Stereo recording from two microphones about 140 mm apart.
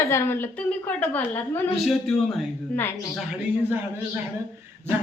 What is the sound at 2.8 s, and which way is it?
Speech, 15° left (ahead or behind).